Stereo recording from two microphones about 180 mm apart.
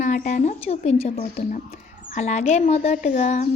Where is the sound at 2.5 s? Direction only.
40° left (ahead or behind).